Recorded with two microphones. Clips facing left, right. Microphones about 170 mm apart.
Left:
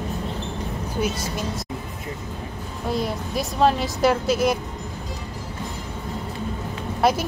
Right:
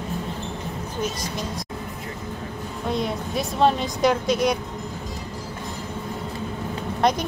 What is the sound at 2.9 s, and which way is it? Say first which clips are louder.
A woman's voice: even; centre (ahead or behind).